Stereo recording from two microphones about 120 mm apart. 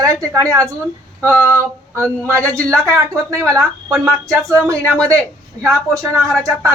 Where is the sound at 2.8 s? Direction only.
25° right (ahead or behind).